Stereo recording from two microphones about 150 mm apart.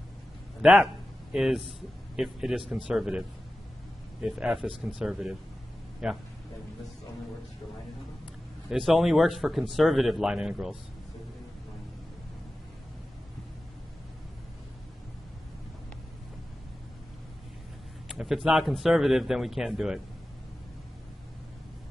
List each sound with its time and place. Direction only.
0.6 s speech: 5° right (ahead or behind)
8.6 s speech: centre (ahead or behind)
18.0 s speech: centre (ahead or behind)